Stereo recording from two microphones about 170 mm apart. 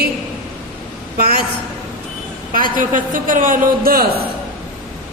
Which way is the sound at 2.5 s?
55° right (ahead or behind).